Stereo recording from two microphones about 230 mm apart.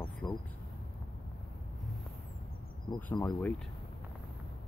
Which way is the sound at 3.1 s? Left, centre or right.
Centre.